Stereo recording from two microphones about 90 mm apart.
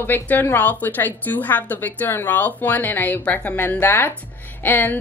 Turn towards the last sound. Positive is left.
turn(degrees=20)  # may be behind; listen again after turning